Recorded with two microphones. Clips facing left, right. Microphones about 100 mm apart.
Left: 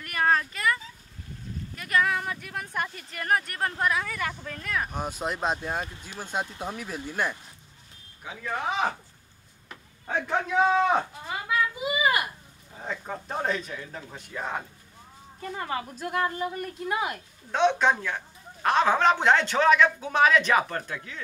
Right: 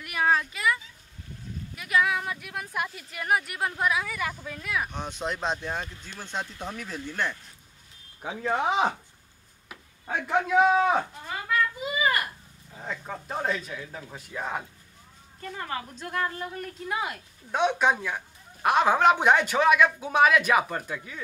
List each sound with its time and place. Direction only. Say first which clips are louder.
0.0 s a sound: even; 5° right (ahead or behind)
1.8 s speech: even; 5° right (ahead or behind)
4.9 s speech: left 1 dB; 5° left (ahead or behind)
8.2 s speech: right 5 dB; 30° right (ahead or behind)
9.7 s speech: even; 10° right (ahead or behind)
11.0 s a sound: even; 10° left (ahead or behind)
12.7 s speech: left 1 dB; 5° left (ahead or behind)
17.5 s speech: left 1 dB; 10° right (ahead or behind)